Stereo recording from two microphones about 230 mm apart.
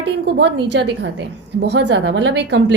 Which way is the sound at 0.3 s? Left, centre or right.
Right.